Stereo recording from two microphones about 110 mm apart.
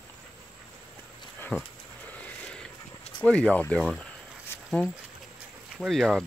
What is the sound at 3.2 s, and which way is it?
Speech, 10° left (ahead or behind).